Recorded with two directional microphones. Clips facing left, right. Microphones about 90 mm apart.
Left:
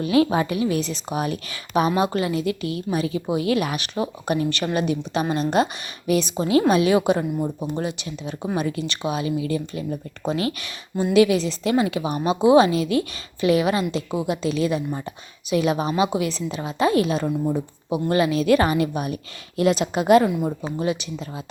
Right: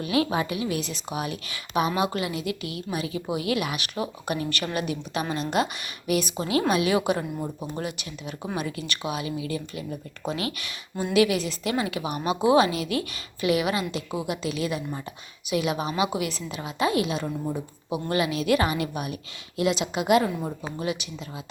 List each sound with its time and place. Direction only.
0.0 s a woman's voice: 30° left (ahead or behind)